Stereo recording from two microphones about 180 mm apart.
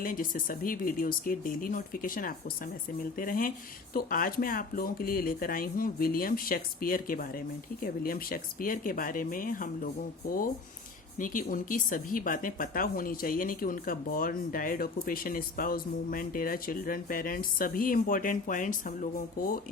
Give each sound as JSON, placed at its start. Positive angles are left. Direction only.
{"t": 0.0, "sound": "speech", "side_deg": 50}
{"t": 11.2, "sound": "speech", "side_deg": 50}